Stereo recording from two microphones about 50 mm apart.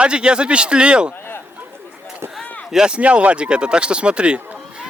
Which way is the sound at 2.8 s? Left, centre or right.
Right.